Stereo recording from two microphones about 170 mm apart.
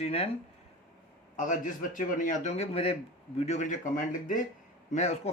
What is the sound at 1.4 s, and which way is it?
Speech, 50° left (ahead or behind).